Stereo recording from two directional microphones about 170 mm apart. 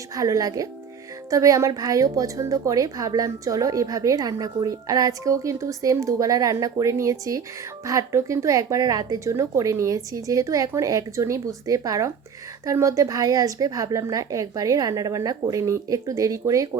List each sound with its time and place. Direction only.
0.1 s a woman's voice: 20° right (ahead or behind)